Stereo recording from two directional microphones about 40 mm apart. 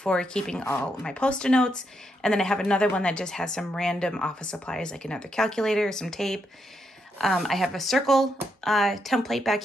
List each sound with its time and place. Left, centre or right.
0.0 s speech: left; by 9.6 s centre